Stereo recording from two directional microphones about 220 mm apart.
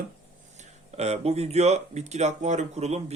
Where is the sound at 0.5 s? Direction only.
30° right (ahead or behind).